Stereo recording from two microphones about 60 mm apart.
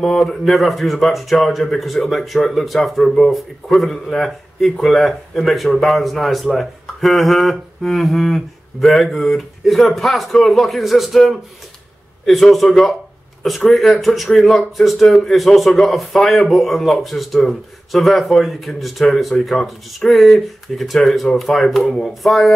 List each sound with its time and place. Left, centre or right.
0.0 s speech: centre